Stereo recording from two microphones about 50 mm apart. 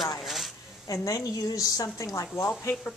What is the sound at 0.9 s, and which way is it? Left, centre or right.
A woman's voice, left.